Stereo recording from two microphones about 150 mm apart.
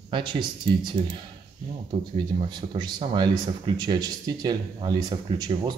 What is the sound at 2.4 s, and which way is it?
Speech, 30° right (ahead or behind).